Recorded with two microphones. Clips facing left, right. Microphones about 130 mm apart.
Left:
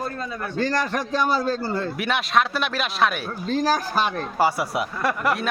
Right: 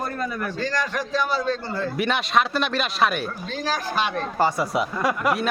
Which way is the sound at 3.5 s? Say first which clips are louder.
Left 8 dB; 40° left (ahead or behind).